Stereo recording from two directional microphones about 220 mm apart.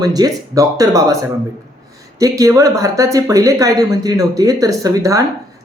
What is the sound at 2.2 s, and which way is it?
A woman's voice, 15° right (ahead or behind).